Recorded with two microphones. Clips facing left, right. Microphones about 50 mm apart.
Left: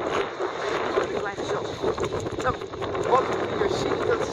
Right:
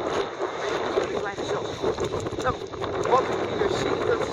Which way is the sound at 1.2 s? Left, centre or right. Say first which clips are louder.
Even; centre.